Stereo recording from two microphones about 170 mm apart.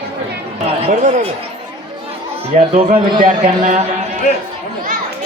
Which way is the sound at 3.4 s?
45° right (ahead or behind).